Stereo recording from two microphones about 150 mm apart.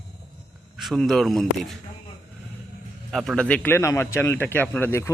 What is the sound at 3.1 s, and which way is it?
A man's voice, centre (ahead or behind).